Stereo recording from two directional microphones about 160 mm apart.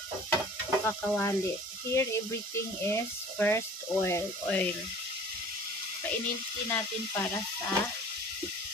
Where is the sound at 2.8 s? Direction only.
15° left (ahead or behind).